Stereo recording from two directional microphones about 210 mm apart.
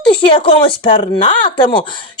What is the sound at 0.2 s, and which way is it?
Speech, 25° left (ahead or behind).